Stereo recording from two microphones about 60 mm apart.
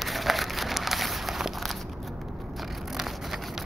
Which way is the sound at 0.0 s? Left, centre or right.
Centre.